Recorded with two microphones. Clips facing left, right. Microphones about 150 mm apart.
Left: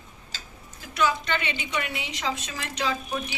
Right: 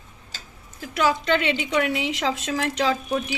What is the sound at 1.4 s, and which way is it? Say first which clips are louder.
A woman's voice: right 8 dB; 85° right.